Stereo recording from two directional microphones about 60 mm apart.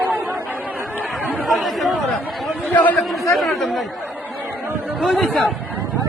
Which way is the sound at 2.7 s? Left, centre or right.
Left.